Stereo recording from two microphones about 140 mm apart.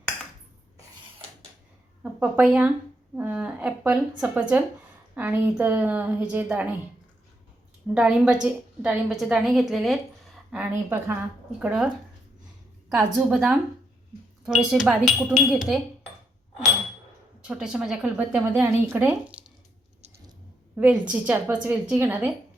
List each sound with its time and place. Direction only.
2.1 s a woman's voice: 10° right (ahead or behind)
7.9 s a woman's voice: 5° right (ahead or behind)
10.5 s a woman's voice: 10° right (ahead or behind)
13.3 s speech: 5° right (ahead or behind)
14.6 s speech: 5° right (ahead or behind)
17.4 s a woman's voice: 5° right (ahead or behind)
20.7 s a woman's voice: 10° right (ahead or behind)